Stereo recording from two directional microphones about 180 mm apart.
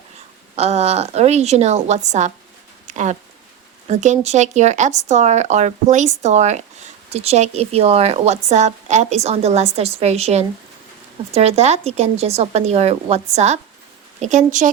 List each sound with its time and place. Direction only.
0.5 s speech: 35° right (ahead or behind)
2.8 s a sound: 40° right (ahead or behind)
3.8 s speech: 40° right (ahead or behind)